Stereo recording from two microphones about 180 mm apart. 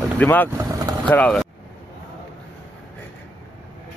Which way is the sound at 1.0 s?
10° left (ahead or behind).